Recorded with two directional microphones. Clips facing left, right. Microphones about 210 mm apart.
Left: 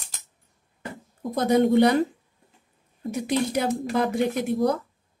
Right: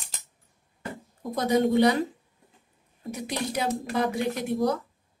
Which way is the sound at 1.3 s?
55° left (ahead or behind).